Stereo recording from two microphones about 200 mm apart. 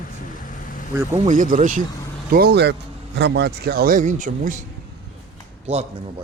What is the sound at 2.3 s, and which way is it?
A man's voice, 55° right (ahead or behind).